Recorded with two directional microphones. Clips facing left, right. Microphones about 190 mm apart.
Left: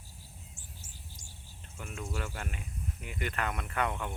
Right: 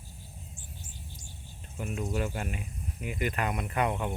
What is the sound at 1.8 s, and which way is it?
Speech, 20° right (ahead or behind).